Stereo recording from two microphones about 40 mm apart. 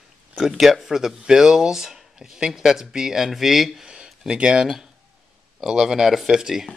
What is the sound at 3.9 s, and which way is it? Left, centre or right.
Speech, right.